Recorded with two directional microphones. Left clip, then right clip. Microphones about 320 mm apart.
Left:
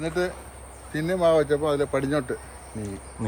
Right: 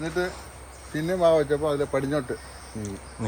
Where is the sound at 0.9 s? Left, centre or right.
Centre.